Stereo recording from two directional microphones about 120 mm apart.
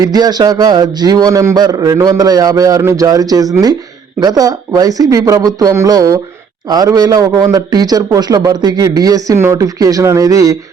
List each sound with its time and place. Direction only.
0.0 s a man's voice: 35° right (ahead or behind)